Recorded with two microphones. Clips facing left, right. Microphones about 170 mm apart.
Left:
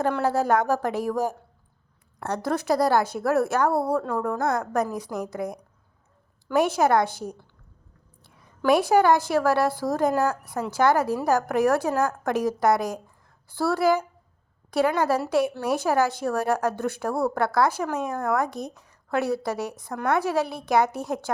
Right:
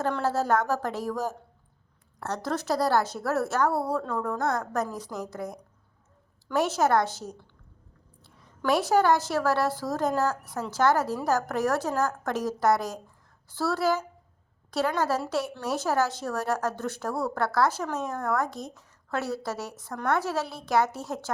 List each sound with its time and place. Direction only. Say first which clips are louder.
0.0 s a woman's voice: left 4 dB; 15° left (ahead or behind)